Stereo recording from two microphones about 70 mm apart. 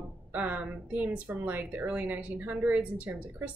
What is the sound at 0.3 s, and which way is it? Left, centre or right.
Speech, right.